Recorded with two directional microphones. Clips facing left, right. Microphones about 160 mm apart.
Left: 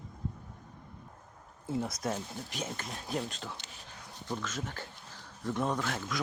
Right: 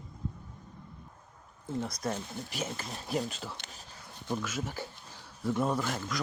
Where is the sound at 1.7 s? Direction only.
5° left (ahead or behind).